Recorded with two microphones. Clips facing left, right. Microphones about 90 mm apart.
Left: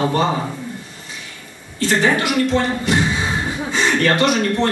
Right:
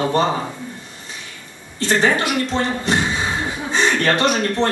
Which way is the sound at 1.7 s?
25° right (ahead or behind).